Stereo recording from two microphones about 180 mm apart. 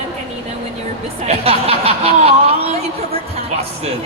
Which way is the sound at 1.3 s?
35° right (ahead or behind).